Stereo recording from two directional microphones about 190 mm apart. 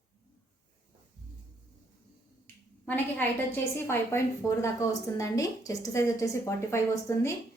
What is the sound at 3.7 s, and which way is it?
A woman's voice, 15° left (ahead or behind).